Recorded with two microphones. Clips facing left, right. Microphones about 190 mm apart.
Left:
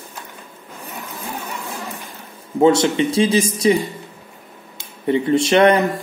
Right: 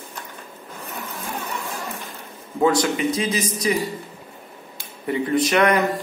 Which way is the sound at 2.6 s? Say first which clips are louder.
Left 5 dB; 25° left (ahead or behind).